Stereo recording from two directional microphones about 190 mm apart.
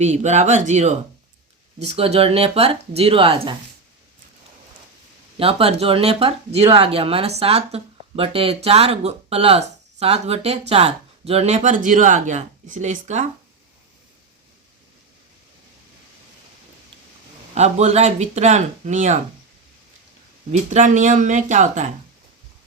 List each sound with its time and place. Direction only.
0.0 s speech: 35° right (ahead or behind)
5.4 s speech: 30° right (ahead or behind)
17.5 s speech: 35° right (ahead or behind)
20.5 s speech: 40° right (ahead or behind)